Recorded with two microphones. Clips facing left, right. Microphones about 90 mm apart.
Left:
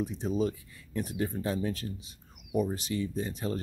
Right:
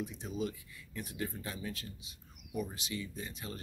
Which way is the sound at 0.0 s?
35° left (ahead or behind).